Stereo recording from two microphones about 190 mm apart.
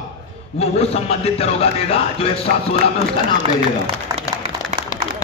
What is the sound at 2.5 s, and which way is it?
Speech, 55° right (ahead or behind).